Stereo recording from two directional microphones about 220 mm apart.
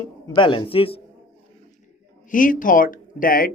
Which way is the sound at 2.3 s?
40° left (ahead or behind).